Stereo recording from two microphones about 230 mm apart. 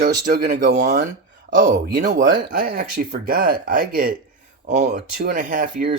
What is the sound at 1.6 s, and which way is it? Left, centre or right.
Speech, right.